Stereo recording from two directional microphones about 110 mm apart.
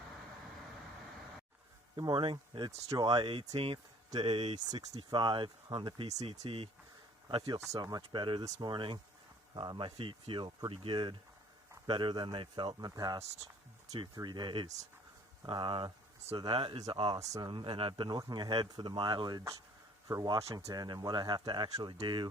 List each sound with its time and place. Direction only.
2.0 s speech: 45° right (ahead or behind)
3.4 s speech: 65° right (ahead or behind)
4.1 s speech: 50° right (ahead or behind)
4.9 s speech: 45° right (ahead or behind)
6.1 s speech: 90° right; by 6.7 s 70° right (ahead or behind)
7.7 s speech: 35° right (ahead or behind)
14.2 s speech: 40° right (ahead or behind)
17.2 s speech: 30° right (ahead or behind)
17.5 s speech: 50° right (ahead or behind)
18.1 s speech: 35° right (ahead or behind)